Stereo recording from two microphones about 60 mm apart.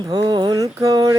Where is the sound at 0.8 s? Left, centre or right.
Right.